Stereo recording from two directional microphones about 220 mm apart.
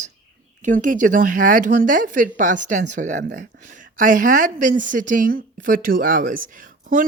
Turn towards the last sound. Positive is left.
turn(degrees=-35)  # may be behind; listen again after turning